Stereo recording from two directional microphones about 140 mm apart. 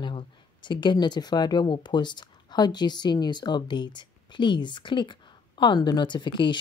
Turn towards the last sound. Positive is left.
turn(degrees=35)  # may be behind; listen again after turning